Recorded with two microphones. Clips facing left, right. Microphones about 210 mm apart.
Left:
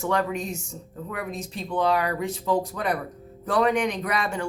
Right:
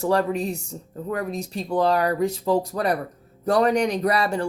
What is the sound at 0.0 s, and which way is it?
Speech, 35° right (ahead or behind).